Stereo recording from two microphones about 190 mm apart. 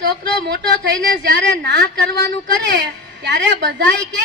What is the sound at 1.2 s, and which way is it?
A man's voice, 65° right (ahead or behind).